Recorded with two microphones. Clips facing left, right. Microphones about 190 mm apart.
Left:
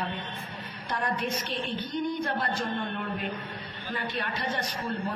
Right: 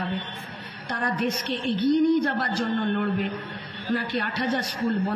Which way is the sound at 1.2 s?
80° right.